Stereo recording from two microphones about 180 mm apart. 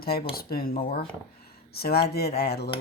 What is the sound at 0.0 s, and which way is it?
Speech, 60° left (ahead or behind).